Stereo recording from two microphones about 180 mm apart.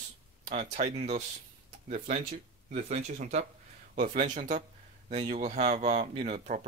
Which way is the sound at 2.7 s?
40° right (ahead or behind).